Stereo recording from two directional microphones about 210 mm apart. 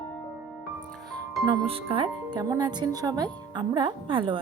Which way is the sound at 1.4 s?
25° right (ahead or behind).